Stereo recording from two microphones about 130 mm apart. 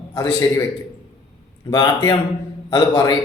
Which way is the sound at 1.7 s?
30° left (ahead or behind).